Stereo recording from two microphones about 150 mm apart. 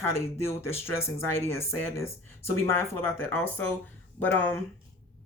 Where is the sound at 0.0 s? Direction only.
15° left (ahead or behind).